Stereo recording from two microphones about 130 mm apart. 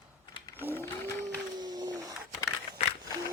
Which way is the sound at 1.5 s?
30° right (ahead or behind).